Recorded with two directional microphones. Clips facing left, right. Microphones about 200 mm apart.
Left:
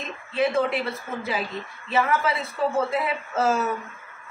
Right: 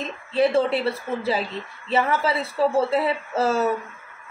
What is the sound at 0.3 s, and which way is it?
A woman's voice, 30° right (ahead or behind).